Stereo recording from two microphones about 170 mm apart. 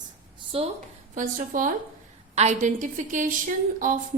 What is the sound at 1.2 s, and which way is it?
A woman's voice, 50° right (ahead or behind).